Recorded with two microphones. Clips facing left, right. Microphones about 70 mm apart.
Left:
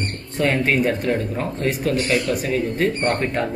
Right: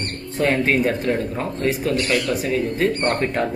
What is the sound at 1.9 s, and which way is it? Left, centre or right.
Speech, right.